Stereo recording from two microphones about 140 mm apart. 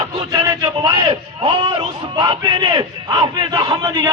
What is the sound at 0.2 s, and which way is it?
A man's voice, 30° right (ahead or behind).